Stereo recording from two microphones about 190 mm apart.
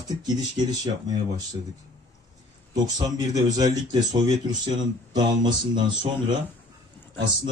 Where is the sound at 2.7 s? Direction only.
20° right (ahead or behind).